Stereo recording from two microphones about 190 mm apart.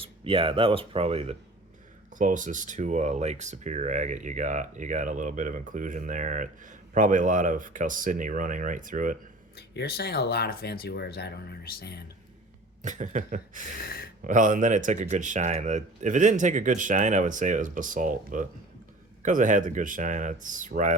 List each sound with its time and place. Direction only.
0.0 s speech: 30° right (ahead or behind); by 9.1 s 45° right (ahead or behind)
9.6 s speech: 60° left (ahead or behind)
12.8 s speech: 40° right (ahead or behind)
13.8 s speech: 50° left (ahead or behind)
14.3 s speech: 45° right (ahead or behind)